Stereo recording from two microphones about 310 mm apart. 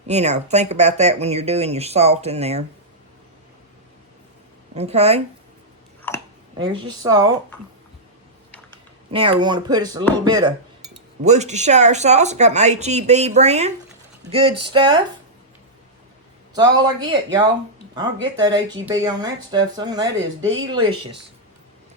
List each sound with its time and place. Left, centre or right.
0.1 s speech: right
4.7 s speech: right
6.1 s a sound: centre
6.6 s speech: centre
9.1 s speech: centre
16.6 s speech: centre